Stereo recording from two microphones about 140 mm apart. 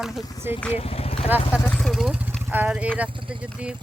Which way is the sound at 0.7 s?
45° left (ahead or behind).